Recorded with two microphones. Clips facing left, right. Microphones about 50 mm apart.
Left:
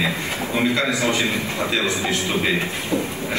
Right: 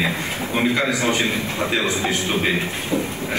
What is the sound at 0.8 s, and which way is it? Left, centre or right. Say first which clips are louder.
Speech: even; right.